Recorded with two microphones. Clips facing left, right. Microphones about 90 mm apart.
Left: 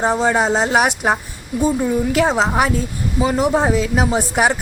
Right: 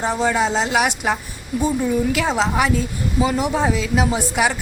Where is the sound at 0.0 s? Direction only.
35° left (ahead or behind).